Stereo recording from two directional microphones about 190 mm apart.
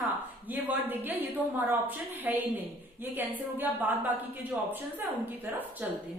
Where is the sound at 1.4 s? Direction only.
10° left (ahead or behind).